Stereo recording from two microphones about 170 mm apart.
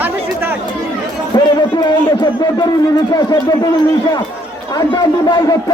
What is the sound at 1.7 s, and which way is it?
Speech, 25° left (ahead or behind).